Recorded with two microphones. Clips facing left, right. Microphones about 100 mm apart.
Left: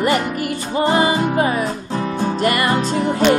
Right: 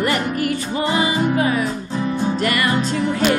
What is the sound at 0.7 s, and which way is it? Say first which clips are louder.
Music: left 5 dB; 40° left (ahead or behind).